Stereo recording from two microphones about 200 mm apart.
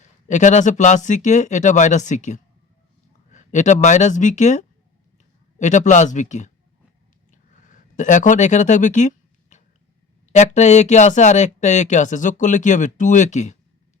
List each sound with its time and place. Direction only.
0.0 s speech: 35° left (ahead or behind)
7.3 s a sound: 40° left (ahead or behind)
10.3 s speech: 35° left (ahead or behind)